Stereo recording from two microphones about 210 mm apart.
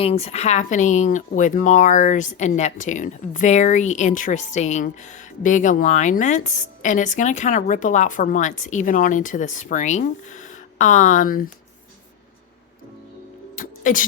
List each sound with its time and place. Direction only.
0.0 s speech: 30° left (ahead or behind)
13.6 s music: 40° left (ahead or behind)